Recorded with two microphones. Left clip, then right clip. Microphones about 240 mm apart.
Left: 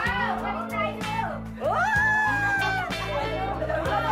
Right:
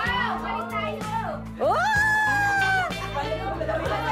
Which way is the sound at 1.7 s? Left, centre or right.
Right.